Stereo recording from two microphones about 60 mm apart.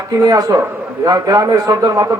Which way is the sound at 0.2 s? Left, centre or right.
Right.